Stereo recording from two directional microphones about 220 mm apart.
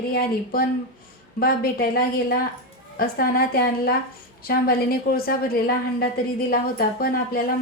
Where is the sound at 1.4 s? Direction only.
40° left (ahead or behind).